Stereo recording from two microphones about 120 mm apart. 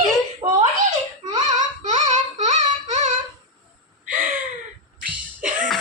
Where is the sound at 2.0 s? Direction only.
85° right.